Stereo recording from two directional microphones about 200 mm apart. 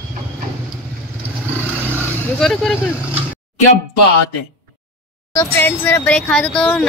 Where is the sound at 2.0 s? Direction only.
Centre (ahead or behind).